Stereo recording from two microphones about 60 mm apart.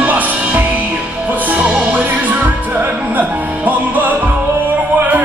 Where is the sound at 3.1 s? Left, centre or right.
Right.